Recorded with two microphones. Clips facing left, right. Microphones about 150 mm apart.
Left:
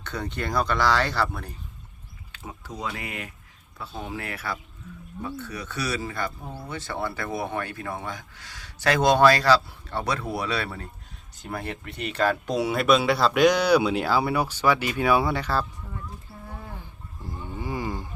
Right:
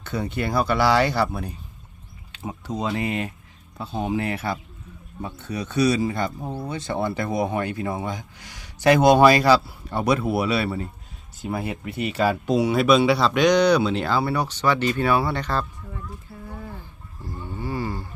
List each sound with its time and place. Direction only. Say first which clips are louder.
0.0 s speech: right 5 dB; 10° right (ahead or behind)
2.3 s speech: right 8 dB; 20° right (ahead or behind); by 15.6 s 5° left (ahead or behind)
17.3 s a sound: right 2 dB; 15° left (ahead or behind)